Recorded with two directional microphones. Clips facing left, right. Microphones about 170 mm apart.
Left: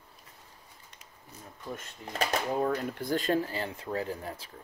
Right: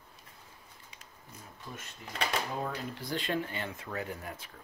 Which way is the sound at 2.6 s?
50° left (ahead or behind).